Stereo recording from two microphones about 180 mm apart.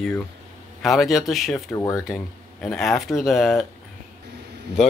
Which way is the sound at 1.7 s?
15° left (ahead or behind).